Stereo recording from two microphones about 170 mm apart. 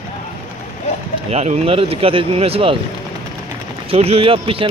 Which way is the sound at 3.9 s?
35° right (ahead or behind).